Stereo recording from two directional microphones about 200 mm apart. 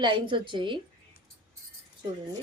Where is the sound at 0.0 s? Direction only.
25° right (ahead or behind).